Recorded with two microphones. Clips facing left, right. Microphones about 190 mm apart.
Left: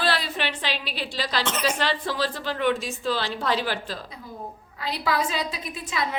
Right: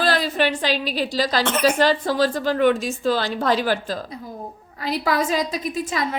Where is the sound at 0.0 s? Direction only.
45° right (ahead or behind).